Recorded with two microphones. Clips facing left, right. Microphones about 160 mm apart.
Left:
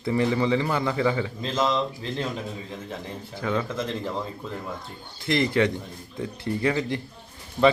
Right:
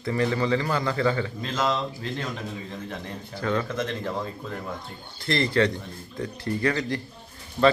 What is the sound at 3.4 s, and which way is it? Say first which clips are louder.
Speech: even; 10° left (ahead or behind).